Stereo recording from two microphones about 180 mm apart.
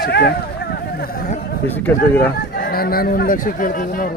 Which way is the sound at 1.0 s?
55° left (ahead or behind).